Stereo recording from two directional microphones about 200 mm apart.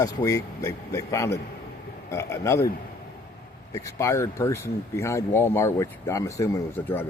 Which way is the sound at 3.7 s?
15° left (ahead or behind).